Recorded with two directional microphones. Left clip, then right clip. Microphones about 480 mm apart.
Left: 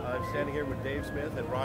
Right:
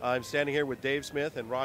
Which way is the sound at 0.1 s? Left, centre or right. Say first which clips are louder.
Right 3 dB; right.